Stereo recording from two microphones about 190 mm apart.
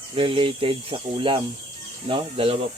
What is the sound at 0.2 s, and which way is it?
Speech, 30° right (ahead or behind).